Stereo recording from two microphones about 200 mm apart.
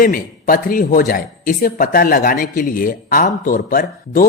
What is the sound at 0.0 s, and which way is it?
Speech, 45° left (ahead or behind).